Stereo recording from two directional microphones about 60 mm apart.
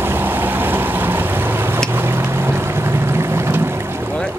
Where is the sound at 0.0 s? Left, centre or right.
Right.